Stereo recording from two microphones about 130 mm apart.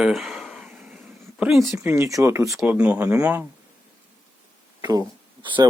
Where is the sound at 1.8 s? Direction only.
20° right (ahead or behind).